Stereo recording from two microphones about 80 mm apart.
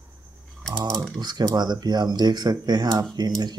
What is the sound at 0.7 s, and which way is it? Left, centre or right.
Speech, right.